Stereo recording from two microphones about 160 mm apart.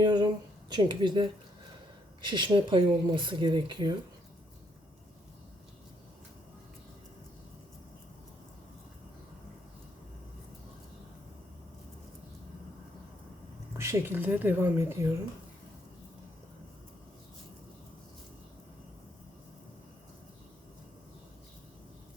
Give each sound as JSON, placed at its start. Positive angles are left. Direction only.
{"t": 0.0, "sound": "a sound", "side_deg": -25}
{"t": 0.7, "sound": "speech", "side_deg": -25}
{"t": 13.7, "sound": "speech", "side_deg": -15}